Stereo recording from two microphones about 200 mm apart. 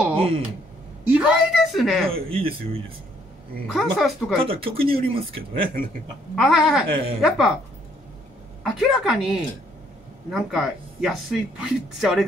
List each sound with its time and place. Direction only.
1.0 s speech: 5° right (ahead or behind)
2.2 s speech: 25° right (ahead or behind)
3.7 s speech: centre (ahead or behind)
4.4 s speech: 25° right (ahead or behind)
6.3 s speech: centre (ahead or behind)
8.6 s speech: centre (ahead or behind)